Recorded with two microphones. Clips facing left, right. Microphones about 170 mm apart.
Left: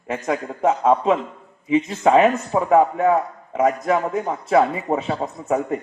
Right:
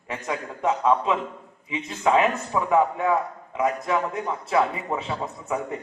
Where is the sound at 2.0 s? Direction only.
30° left (ahead or behind).